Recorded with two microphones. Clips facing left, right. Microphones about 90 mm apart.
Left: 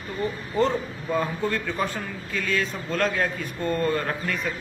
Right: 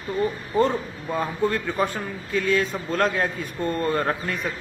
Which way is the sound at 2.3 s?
30° right (ahead or behind).